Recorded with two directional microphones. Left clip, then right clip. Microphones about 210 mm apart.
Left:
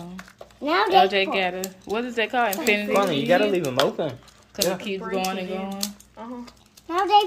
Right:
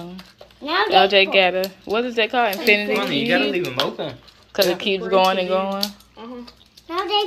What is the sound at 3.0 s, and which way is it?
Speech, 35° left (ahead or behind).